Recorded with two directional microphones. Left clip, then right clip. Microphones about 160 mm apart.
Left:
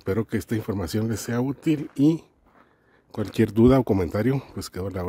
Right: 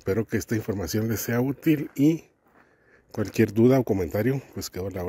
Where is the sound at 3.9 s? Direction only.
20° left (ahead or behind).